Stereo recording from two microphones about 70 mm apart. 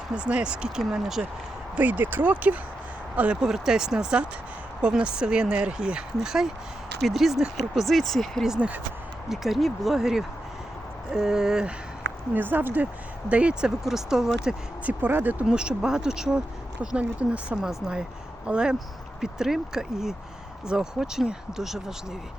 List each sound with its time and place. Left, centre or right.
0.1 s speech: centre
1.7 s speech: right
3.4 s speech: centre
8.4 s speech: centre
9.3 s speech: centre
12.3 s speech: right
13.3 s speech: centre
14.8 s speech: right
15.4 s speech: centre